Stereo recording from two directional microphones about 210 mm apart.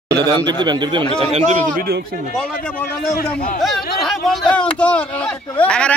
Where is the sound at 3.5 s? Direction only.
Centre (ahead or behind).